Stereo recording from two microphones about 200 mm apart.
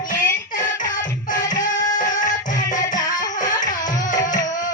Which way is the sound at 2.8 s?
20° left (ahead or behind).